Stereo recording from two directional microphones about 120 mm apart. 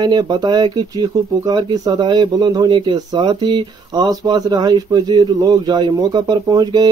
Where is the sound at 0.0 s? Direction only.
35° right (ahead or behind).